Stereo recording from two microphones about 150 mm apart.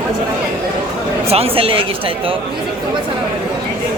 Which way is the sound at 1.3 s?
40° right (ahead or behind).